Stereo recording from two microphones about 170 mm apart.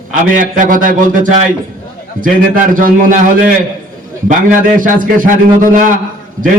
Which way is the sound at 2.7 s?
50° right (ahead or behind).